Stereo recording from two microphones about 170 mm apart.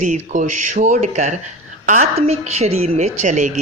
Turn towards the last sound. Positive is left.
turn(degrees=-45)  # may be behind; listen again after turning